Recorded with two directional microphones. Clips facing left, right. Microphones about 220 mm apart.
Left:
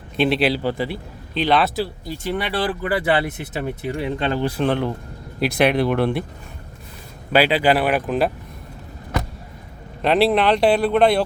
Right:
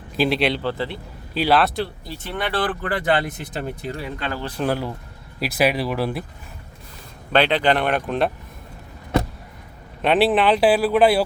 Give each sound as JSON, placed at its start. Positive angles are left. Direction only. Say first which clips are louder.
{"t": 0.2, "sound": "speech", "louder": "left 2 dB", "side_deg": 0}
{"t": 1.3, "sound": "speech", "louder": "even", "side_deg": -5}
{"t": 4.0, "sound": "speech", "louder": "left 9 dB", "side_deg": 25}
{"t": 4.6, "sound": "speech", "louder": "right 1 dB", "side_deg": -5}
{"t": 7.3, "sound": "speech", "louder": "left 2 dB", "side_deg": 5}
{"t": 10.0, "sound": "speech", "louder": "left 1 dB", "side_deg": 0}